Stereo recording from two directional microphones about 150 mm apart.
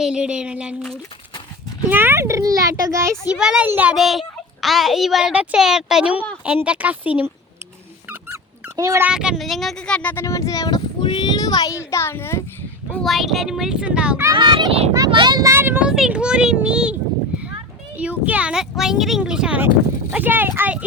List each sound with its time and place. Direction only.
0.0 s speech: 5° right (ahead or behind)
1.9 s a child's voice: 15° right (ahead or behind)
3.3 s a child's voice: 5° right (ahead or behind)
8.3 s dog: 20° right (ahead or behind)
9.1 s speech: 5° right (ahead or behind); by 10.8 s 25° left (ahead or behind)
10.8 s a sound: 35° left (ahead or behind); by 12.4 s 15° left (ahead or behind)
12.9 s a child's voice: centre (ahead or behind)
14.3 s a child's voice: 30° right (ahead or behind)
14.9 s a child's voice: 25° right (ahead or behind); by 16.9 s 5° right (ahead or behind)
17.9 s speech: 10° right (ahead or behind)